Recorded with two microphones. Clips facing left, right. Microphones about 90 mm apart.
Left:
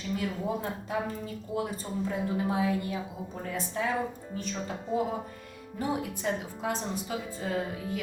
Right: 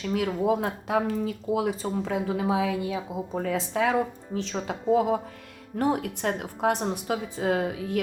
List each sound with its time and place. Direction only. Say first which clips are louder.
0.0 s speech: right 7 dB; 90° right
5.7 s a woman's voice: right 6 dB; 70° right (ahead or behind)